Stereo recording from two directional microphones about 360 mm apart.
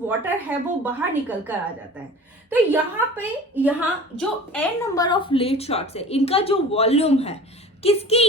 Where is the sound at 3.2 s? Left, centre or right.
Centre.